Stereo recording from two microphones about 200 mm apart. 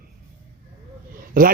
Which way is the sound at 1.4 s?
45° right (ahead or behind).